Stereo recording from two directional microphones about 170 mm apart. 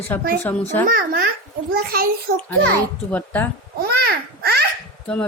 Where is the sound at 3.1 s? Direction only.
10° left (ahead or behind).